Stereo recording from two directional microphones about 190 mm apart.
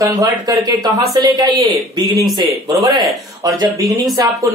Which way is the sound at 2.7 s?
Centre (ahead or behind).